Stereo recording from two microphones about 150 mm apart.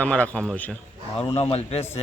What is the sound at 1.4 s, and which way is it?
Speech, 40° left (ahead or behind).